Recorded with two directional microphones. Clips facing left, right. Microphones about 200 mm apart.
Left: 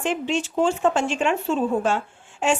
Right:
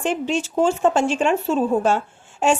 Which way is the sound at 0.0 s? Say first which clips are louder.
Right 2 dB; 40° right (ahead or behind).